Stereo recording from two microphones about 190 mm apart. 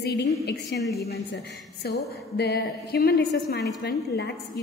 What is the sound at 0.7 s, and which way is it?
A woman's voice, 60° left (ahead or behind).